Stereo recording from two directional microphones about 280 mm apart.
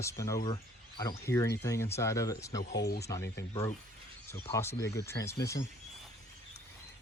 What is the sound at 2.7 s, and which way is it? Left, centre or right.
Speech, left.